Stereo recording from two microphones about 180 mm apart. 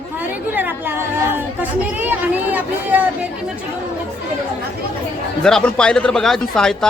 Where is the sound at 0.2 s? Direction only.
10° right (ahead or behind).